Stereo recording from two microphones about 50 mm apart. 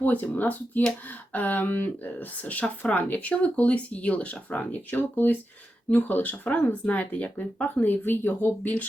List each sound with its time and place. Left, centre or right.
0.0 s speech: left